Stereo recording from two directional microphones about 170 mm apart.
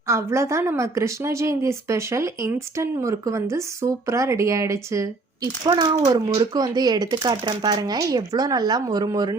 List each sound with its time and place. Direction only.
0.1 s a woman's voice: 15° right (ahead or behind)